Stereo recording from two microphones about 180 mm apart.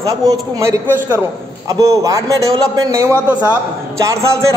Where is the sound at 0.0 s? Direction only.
20° right (ahead or behind).